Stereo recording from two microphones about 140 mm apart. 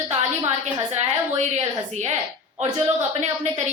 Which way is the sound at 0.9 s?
55° right (ahead or behind).